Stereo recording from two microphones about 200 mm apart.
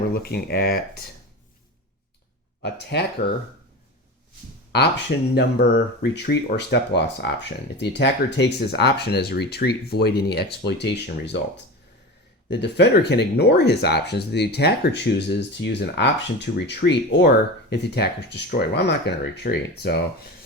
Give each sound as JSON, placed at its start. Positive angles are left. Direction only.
{"t": 0.1, "sound": "speech", "side_deg": 50}
{"t": 2.6, "sound": "speech", "side_deg": 60}
{"t": 3.2, "sound": "speech", "side_deg": 40}
{"t": 4.7, "sound": "speech", "side_deg": 60}
{"t": 12.5, "sound": "speech", "side_deg": 60}